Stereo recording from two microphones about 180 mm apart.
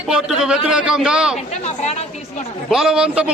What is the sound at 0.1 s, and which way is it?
A man's voice, 5° right (ahead or behind).